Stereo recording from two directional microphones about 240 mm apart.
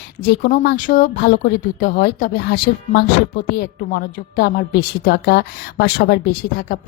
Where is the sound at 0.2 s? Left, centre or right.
Left.